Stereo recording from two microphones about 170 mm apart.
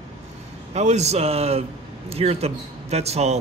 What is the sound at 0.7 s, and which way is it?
Speech, 40° right (ahead or behind).